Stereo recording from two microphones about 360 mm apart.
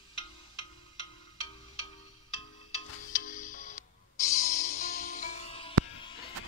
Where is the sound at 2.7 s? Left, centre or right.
Left.